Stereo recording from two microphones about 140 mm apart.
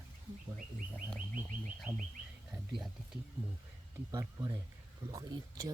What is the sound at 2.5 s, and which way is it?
Speech, centre (ahead or behind).